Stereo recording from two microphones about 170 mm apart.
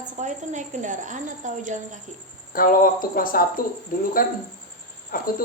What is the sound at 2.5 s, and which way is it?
Speech, 55° left (ahead or behind).